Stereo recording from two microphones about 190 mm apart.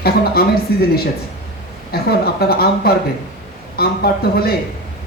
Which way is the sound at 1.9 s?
55° left (ahead or behind).